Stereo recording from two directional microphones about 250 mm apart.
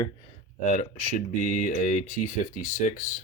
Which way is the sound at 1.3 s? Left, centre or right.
Left.